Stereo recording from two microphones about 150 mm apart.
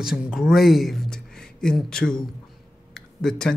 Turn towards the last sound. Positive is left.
turn(degrees=5)  # may be behind; listen again after turning